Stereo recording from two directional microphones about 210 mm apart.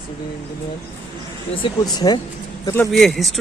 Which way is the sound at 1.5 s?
20° left (ahead or behind).